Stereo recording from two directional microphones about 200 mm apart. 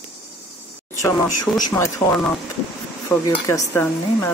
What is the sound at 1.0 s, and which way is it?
Speech, 15° left (ahead or behind).